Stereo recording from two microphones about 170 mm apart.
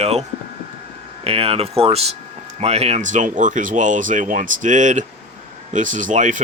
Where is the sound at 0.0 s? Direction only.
40° right (ahead or behind).